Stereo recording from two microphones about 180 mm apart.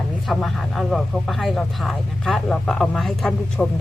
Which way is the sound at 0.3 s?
Centre (ahead or behind).